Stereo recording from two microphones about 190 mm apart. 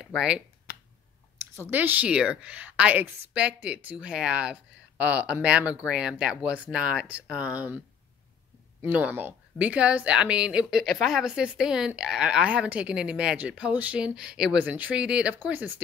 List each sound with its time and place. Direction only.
0.0 s speech: 5° right (ahead or behind)
0.7 s finger snapping: 55° left (ahead or behind)
1.4 s a woman's voice: 15° right (ahead or behind)
8.8 s a woman's voice: 10° right (ahead or behind)